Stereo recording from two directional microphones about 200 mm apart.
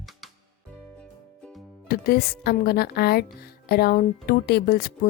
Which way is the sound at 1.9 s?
50° left (ahead or behind).